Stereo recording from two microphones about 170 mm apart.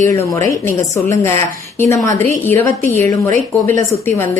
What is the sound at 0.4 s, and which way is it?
A woman's voice, 15° left (ahead or behind).